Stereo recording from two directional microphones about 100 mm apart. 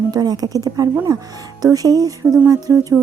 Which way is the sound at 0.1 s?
40° right (ahead or behind).